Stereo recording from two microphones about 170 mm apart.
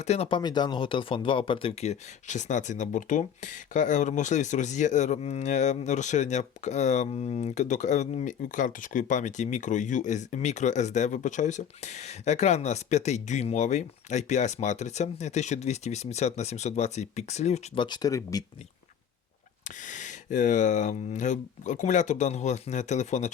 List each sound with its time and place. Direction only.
0.0 s speech: 40° left (ahead or behind)
17.7 s speech: 25° left (ahead or behind)
19.6 s speech: 45° left (ahead or behind)